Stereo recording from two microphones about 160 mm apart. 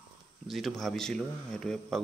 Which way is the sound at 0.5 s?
Centre (ahead or behind).